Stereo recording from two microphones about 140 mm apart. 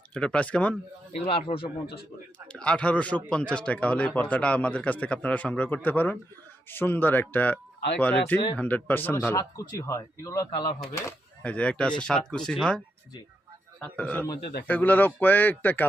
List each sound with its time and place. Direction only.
0.1 s speech: 10° left (ahead or behind)
1.2 s speech: 45° left (ahead or behind)
2.5 s speech: 10° left (ahead or behind)
9.3 s a man's voice: 25° left (ahead or behind)
11.4 s speech: 10° left (ahead or behind)